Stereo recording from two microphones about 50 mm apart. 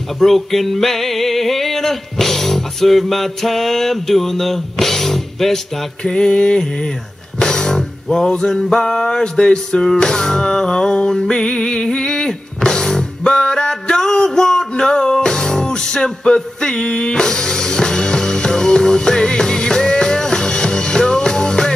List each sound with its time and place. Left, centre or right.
0.2 s music: centre
6.0 s mantra: centre
7.3 s music: centre